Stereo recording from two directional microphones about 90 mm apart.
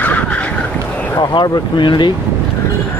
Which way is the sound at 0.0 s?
15° left (ahead or behind).